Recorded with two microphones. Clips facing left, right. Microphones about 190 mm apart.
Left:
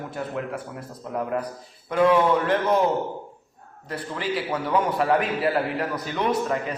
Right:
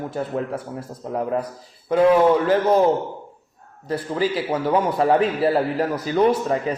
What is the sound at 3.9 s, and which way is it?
A man's voice, 35° right (ahead or behind).